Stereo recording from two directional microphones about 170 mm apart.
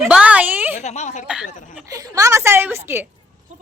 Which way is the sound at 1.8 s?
20° right (ahead or behind).